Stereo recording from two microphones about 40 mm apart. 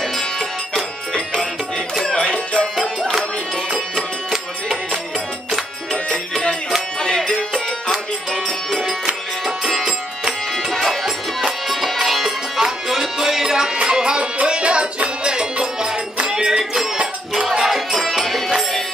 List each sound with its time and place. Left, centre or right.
0.0 s music: centre
1.1 s music: centre
7.0 s music: centre
9.7 s music: centre
10.5 s music: centre